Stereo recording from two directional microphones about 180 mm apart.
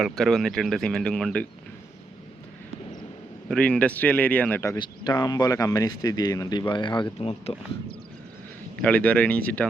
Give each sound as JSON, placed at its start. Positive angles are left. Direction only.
{"t": 0.0, "sound": "speech", "side_deg": 0}
{"t": 3.5, "sound": "speech", "side_deg": 5}
{"t": 4.8, "sound": "speech", "side_deg": 25}
{"t": 8.8, "sound": "speech", "side_deg": 10}